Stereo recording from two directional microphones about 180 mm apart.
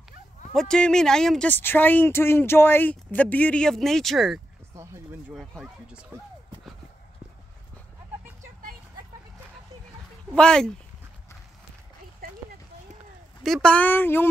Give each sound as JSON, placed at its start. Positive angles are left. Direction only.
{"t": 0.6, "sound": "speech", "side_deg": 5}
{"t": 10.3, "sound": "speech", "side_deg": 5}
{"t": 13.4, "sound": "speech", "side_deg": 5}